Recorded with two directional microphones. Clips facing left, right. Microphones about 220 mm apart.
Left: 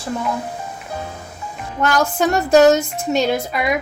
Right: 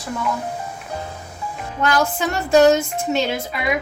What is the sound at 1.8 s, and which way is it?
Music, 45° left (ahead or behind).